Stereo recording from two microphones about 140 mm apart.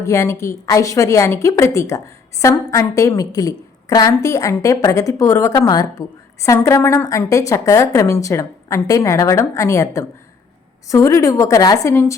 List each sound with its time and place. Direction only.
0.0 s a woman's voice: 20° left (ahead or behind)